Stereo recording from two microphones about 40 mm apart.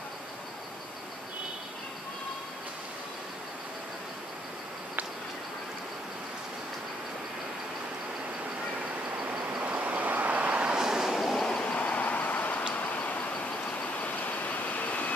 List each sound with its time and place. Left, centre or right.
9.6 s train: right; by 11.1 s centre
11.3 s vehicle: centre
11.6 s vehicle: left
11.9 s vehicle: left
13.9 s train: left